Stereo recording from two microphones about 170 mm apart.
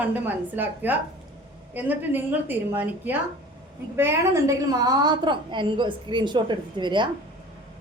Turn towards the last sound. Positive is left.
turn(degrees=-25)  # may be behind; listen again after turning